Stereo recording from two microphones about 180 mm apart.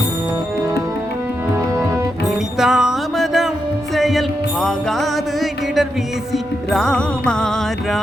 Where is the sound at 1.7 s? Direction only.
15° right (ahead or behind).